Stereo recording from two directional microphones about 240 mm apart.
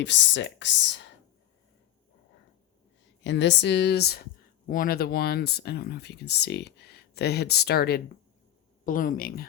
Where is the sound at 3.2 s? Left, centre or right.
Left.